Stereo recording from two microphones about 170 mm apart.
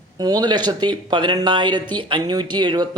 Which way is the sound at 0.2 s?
25° right (ahead or behind).